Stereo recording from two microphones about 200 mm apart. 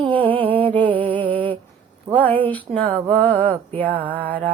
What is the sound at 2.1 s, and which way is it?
Female singing, 10° left (ahead or behind).